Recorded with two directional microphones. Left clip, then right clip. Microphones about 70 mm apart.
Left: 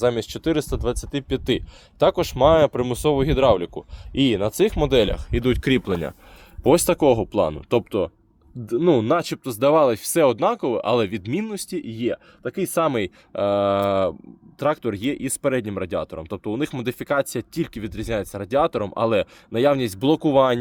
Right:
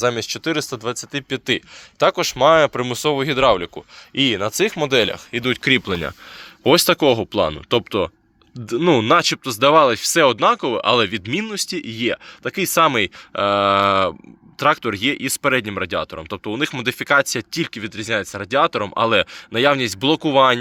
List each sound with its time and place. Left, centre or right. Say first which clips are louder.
0.0 s speech: right 1 dB; left
4.2 s speech: right 2 dB; left
4.6 s speech: right 1 dB; left
5.1 s speech: right 1 dB; left
5.5 s speech: right 5 dB; left
6.7 s speech: right 2 dB; centre
7.9 s speech: right 3 dB; centre
9.2 s speech: right 4 dB; centre
11.9 s speech: right 4 dB; right
12.8 s speech: right 6 dB; centre
13.3 s speech: right 4 dB; centre
16.9 s speech: right 7 dB; centre
17.7 s speech: right 5 dB; left